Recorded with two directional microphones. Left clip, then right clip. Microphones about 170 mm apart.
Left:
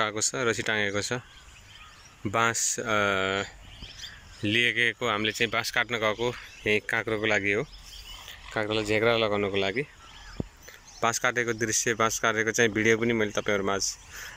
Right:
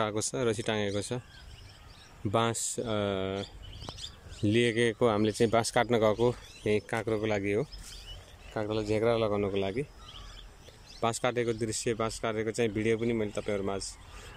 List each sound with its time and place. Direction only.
0.0 s speech: 15° right (ahead or behind)
2.3 s speech: 15° right (ahead or behind)
4.5 s speech: 25° right (ahead or behind)
6.6 s speech: 15° right (ahead or behind)
11.0 s speech: 15° right (ahead or behind)